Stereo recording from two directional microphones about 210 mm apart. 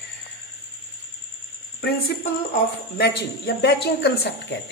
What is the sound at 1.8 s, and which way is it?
A woman's voice, 50° left (ahead or behind).